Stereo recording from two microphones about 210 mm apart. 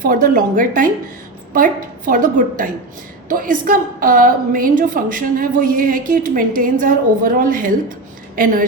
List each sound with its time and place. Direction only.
0.0 s a woman's voice: 40° right (ahead or behind)